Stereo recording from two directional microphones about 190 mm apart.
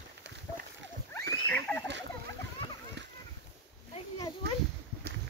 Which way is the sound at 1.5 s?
10° left (ahead or behind).